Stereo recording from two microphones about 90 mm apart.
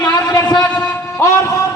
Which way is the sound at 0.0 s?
45° left (ahead or behind).